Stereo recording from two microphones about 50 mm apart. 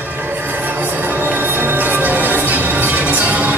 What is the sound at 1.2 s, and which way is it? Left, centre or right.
Music, right.